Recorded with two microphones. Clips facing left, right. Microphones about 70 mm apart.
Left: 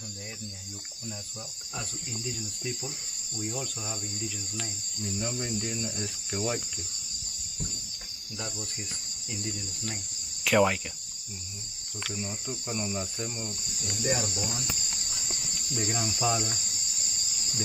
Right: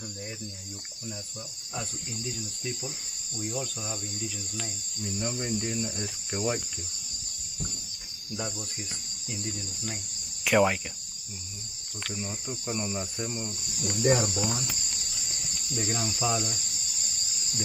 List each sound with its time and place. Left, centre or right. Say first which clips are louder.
2.2 s cricket: even; centre
8.4 s speech: right 2 dB; centre
9.3 s cricket: even; centre
10.4 s speech: even; centre
12.0 s cricket: even; centre
14.0 s cricket: right 6 dB; right
14.5 s cricket: right 2 dB; centre